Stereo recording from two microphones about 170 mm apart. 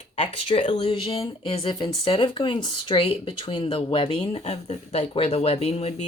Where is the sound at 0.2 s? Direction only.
40° left (ahead or behind).